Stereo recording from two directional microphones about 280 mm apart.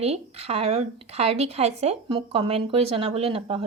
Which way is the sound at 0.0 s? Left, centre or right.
Right.